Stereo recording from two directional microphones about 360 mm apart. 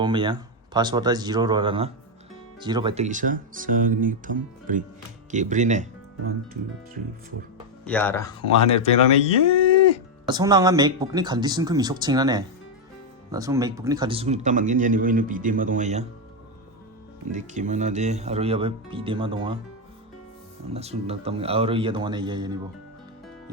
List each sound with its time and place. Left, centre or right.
0.0 s speech: centre
7.9 s speech: centre
10.2 s speech: centre
17.3 s speech: centre
20.7 s speech: centre